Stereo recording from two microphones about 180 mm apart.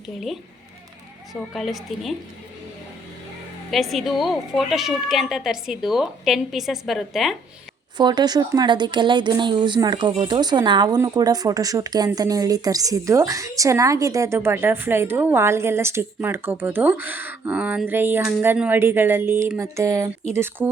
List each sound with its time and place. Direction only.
1.3 s speech: centre (ahead or behind)
3.7 s speech: centre (ahead or behind)
7.9 s speech: 25° right (ahead or behind)